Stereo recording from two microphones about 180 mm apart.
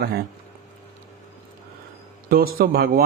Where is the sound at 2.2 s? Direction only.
55° right (ahead or behind).